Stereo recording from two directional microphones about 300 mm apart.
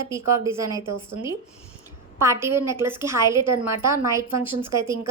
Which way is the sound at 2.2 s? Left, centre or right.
Centre.